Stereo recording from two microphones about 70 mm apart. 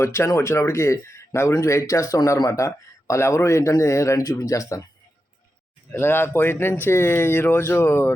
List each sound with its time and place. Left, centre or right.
0.0 s speech: left
4.2 s speech: left
5.9 s speech: left